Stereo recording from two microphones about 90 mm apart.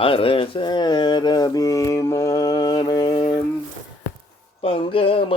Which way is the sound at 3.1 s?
70° left (ahead or behind).